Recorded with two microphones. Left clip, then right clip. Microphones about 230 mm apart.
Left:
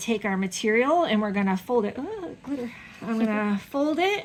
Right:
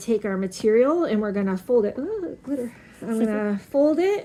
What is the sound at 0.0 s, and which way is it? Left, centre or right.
Speech, left.